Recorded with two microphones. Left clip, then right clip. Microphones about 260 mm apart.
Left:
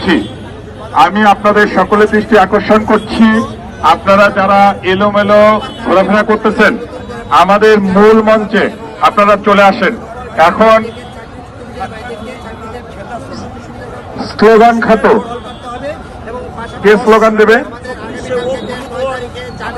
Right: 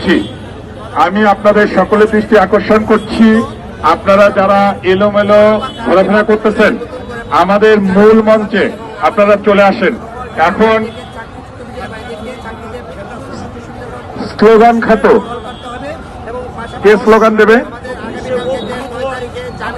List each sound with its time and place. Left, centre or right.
1.0 s a man's voice: centre
3.8 s mantra: centre
7.3 s a man's voice: centre
14.4 s mantra: left
16.8 s a man's voice: left
17.8 s a sound: centre
19.1 s vehicle: centre